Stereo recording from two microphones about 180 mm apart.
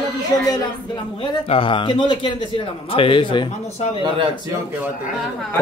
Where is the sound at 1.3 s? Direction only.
30° left (ahead or behind).